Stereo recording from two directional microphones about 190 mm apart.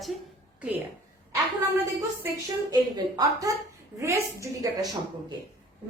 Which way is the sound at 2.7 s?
20° right (ahead or behind).